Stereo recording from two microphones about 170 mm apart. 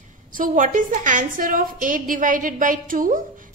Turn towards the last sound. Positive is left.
turn(degrees=-55)  # may be behind; listen again after turning